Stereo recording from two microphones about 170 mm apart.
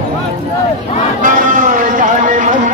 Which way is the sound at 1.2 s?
55° right (ahead or behind).